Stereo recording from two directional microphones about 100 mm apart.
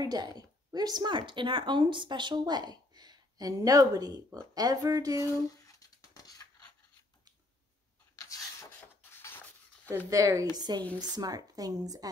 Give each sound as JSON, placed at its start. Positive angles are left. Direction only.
{"t": 0.0, "sound": "a woman's voice", "side_deg": -45}
{"t": 5.2, "sound": "a sound", "side_deg": 35}
{"t": 8.3, "sound": "rub", "side_deg": 35}
{"t": 9.8, "sound": "speech", "side_deg": -30}